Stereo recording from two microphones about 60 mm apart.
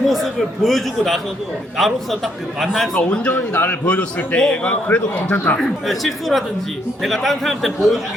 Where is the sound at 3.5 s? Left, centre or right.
Left.